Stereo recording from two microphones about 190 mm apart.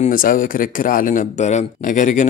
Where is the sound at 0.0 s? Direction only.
45° left (ahead or behind).